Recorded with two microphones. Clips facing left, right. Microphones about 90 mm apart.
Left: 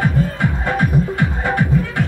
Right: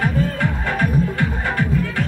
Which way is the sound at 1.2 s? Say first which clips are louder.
Left 3 dB; 20° left (ahead or behind).